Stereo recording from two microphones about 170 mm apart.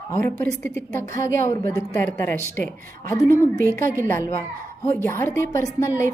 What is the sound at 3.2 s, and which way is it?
Speech, 15° right (ahead or behind).